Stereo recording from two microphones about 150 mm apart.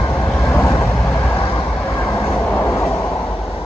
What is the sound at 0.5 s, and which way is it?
Vehicle, 15° left (ahead or behind).